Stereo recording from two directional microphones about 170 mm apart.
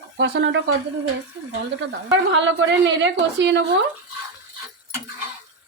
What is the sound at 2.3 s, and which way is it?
A woman's voice, 90° right.